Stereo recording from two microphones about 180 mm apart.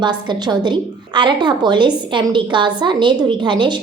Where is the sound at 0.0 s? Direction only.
25° right (ahead or behind).